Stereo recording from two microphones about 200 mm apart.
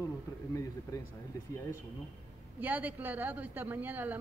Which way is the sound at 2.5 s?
10° right (ahead or behind).